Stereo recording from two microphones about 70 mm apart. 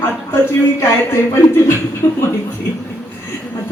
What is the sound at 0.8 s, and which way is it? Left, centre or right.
Speech, left.